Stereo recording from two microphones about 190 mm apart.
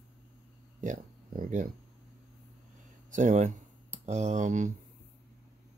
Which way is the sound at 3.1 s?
40° right (ahead or behind).